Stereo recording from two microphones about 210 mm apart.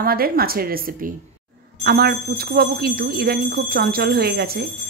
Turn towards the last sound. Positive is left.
turn(degrees=-45)  # may be behind; listen again after turning